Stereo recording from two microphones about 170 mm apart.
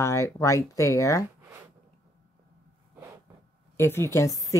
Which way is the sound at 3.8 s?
15° left (ahead or behind).